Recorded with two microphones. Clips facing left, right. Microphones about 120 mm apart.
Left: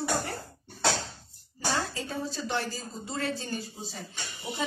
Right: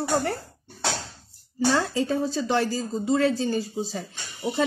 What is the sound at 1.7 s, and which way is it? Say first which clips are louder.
Speech: right 8 dB; 90° right.